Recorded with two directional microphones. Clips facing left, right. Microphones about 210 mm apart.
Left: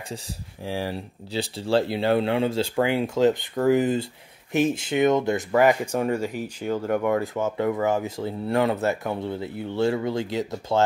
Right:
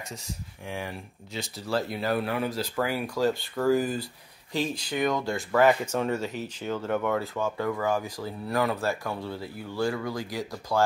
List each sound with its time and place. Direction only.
0.7 s speech: 35° left (ahead or behind)